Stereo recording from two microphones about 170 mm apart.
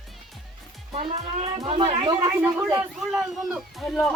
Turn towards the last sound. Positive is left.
turn(degrees=0)  # may be behind; listen again after turning